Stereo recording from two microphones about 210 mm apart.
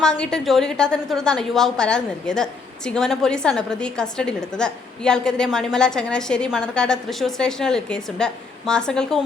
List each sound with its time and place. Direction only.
0.2 s a woman's voice: 5° left (ahead or behind)